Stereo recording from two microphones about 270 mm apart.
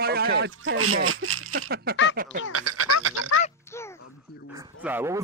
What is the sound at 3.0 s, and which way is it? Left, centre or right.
Speech, right.